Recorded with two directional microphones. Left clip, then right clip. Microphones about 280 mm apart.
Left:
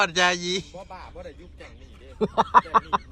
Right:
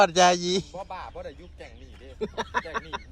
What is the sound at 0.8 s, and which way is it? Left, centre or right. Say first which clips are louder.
Speech: right 3 dB; right.